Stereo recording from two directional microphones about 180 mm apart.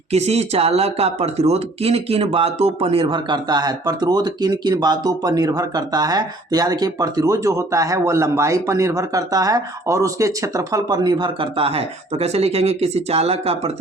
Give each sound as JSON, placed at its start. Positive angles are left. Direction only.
{"t": 0.1, "sound": "speech", "side_deg": -35}